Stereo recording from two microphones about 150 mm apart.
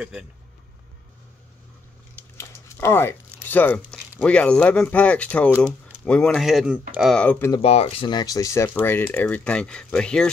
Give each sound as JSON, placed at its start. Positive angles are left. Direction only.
{"t": 0.0, "sound": "speech", "side_deg": -10}
{"t": 2.3, "sound": "speech", "side_deg": 20}
{"t": 7.2, "sound": "speech", "side_deg": 10}
{"t": 7.6, "sound": "speech", "side_deg": 40}
{"t": 8.1, "sound": "speech", "side_deg": 25}